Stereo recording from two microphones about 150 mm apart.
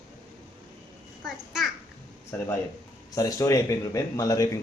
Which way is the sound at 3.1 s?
25° left (ahead or behind).